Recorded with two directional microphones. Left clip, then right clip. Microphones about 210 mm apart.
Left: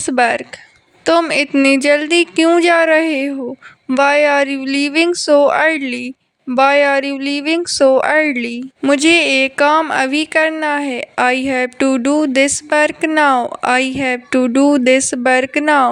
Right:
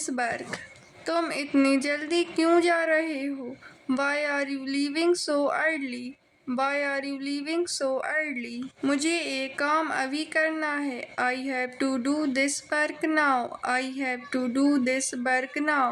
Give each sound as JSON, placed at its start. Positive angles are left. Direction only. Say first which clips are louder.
{"t": 0.0, "sound": "speech", "louder": "left 15 dB", "side_deg": 40}